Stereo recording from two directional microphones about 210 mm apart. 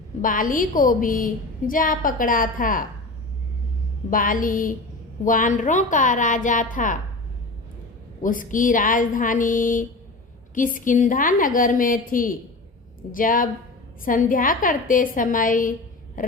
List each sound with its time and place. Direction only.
0.2 s a woman's voice: 40° left (ahead or behind)
4.1 s a woman's voice: 40° left (ahead or behind)
8.2 s a woman's voice: 40° left (ahead or behind)
16.2 s a sound: 40° left (ahead or behind)